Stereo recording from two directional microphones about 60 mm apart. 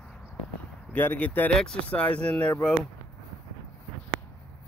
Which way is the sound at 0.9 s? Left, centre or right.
Left.